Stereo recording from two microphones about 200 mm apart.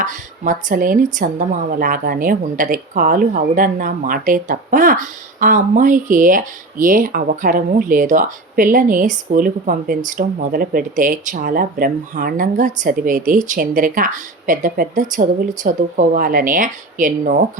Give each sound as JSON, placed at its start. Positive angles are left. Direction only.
{"t": 0.0, "sound": "speech", "side_deg": -40}